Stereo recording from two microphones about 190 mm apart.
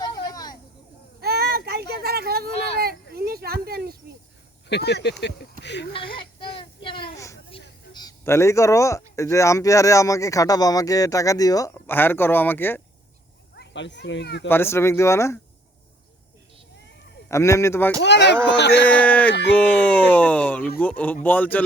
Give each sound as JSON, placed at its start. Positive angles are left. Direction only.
{"t": 0.0, "sound": "vehicle", "side_deg": 20}
{"t": 1.2, "sound": "a sound", "side_deg": -55}
{"t": 4.7, "sound": "speech", "side_deg": 60}
{"t": 6.6, "sound": "child singing", "side_deg": 25}
{"t": 7.9, "sound": "speech", "side_deg": 15}
{"t": 13.6, "sound": "speech", "side_deg": 70}
{"t": 14.4, "sound": "speech", "side_deg": 10}
{"t": 17.2, "sound": "speech", "side_deg": 15}
{"t": 18.0, "sound": "speech", "side_deg": 65}
{"t": 18.9, "sound": "speech", "side_deg": 10}
{"t": 19.3, "sound": "speech", "side_deg": 65}
{"t": 19.5, "sound": "speech", "side_deg": 10}